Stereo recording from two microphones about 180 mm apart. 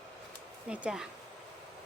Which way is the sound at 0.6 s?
5° right (ahead or behind).